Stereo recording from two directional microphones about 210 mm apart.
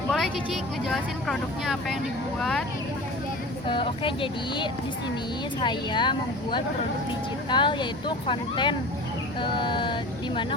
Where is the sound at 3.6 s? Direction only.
25° left (ahead or behind).